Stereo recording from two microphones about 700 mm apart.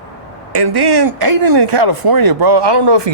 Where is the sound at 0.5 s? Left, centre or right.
Right.